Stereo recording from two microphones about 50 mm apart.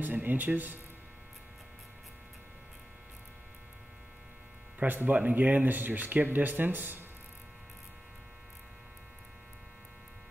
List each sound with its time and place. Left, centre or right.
0.0 s speech: right
4.7 s speech: right